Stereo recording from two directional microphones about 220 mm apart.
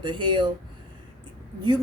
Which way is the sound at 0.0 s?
20° right (ahead or behind).